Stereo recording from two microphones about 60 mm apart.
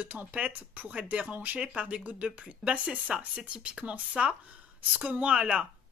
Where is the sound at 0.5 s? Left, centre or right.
Right.